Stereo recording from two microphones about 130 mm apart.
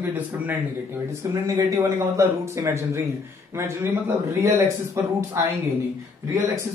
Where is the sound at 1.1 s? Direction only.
25° right (ahead or behind).